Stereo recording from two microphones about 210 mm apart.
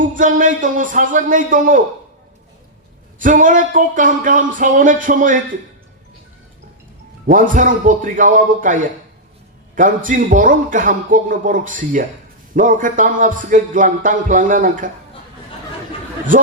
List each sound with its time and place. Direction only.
0.0 s a man's voice: 40° right (ahead or behind)
3.2 s a man's voice: 40° right (ahead or behind)
7.3 s a man's voice: 40° right (ahead or behind)